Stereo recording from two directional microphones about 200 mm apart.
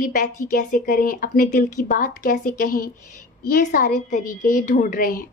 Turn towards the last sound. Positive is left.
turn(degrees=45)  # may be behind; listen again after turning